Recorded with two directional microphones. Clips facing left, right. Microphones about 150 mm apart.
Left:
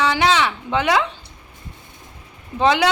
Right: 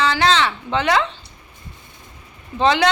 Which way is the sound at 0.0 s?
15° left (ahead or behind).